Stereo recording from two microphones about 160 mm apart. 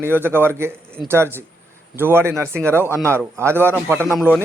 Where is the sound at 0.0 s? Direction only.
15° right (ahead or behind).